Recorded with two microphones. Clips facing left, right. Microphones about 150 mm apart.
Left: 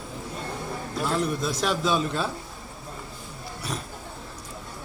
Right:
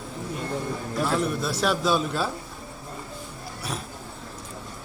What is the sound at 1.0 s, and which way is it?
A man's voice, 5° right (ahead or behind).